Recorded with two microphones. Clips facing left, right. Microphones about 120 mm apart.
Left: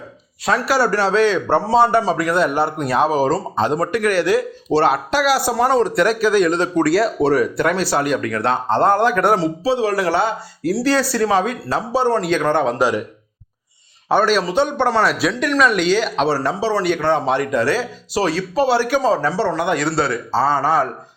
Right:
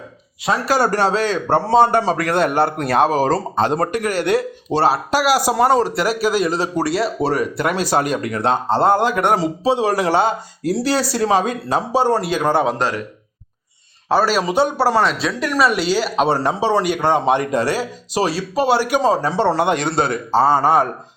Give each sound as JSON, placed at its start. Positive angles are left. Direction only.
{"t": 0.6, "sound": "a man's voice", "side_deg": -45}
{"t": 2.1, "sound": "a man's voice", "side_deg": -65}
{"t": 3.9, "sound": "speech", "side_deg": -40}
{"t": 5.2, "sound": "speech", "side_deg": -10}
{"t": 7.7, "sound": "speech", "side_deg": -15}
{"t": 14.1, "sound": "speech", "side_deg": -5}
{"t": 16.3, "sound": "speech", "side_deg": -20}